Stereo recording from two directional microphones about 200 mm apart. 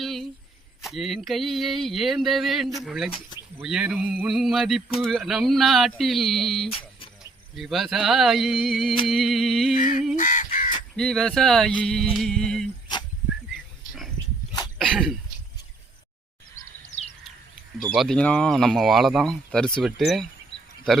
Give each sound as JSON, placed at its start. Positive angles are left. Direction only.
{"t": 0.0, "sound": "a sound", "side_deg": 0}
{"t": 0.9, "sound": "speech", "side_deg": 0}
{"t": 9.7, "sound": "fowl", "side_deg": 40}
{"t": 10.2, "sound": "crow", "side_deg": 40}
{"t": 10.9, "sound": "speech", "side_deg": 0}
{"t": 14.8, "sound": "throat clearing", "side_deg": 0}
{"t": 17.8, "sound": "speech", "side_deg": 0}